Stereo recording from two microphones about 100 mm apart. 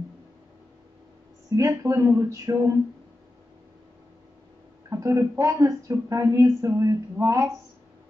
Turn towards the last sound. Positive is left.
turn(degrees=-30)  # may be behind; listen again after turning